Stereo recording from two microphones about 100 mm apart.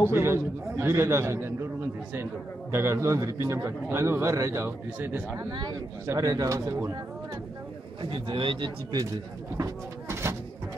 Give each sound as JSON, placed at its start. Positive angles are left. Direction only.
{"t": 0.1, "sound": "a man's voice", "side_deg": -25}
{"t": 2.7, "sound": "a man's voice", "side_deg": -25}
{"t": 5.5, "sound": "speech", "side_deg": -45}
{"t": 8.0, "sound": "a man's voice", "side_deg": -60}
{"t": 9.6, "sound": "speech", "side_deg": -25}